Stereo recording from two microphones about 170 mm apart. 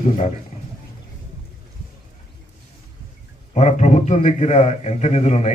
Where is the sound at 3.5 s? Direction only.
45° left (ahead or behind).